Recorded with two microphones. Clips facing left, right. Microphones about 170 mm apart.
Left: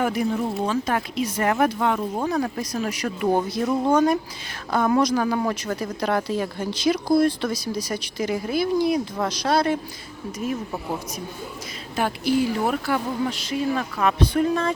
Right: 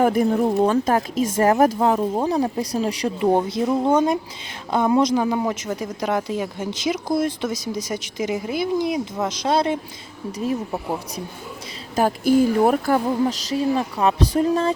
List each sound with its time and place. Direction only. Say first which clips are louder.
0.0 s speech: right 5 dB; 45° right (ahead or behind); by 11.2 s 30° right (ahead or behind)
11.9 s speech: right 5 dB; 45° right (ahead or behind)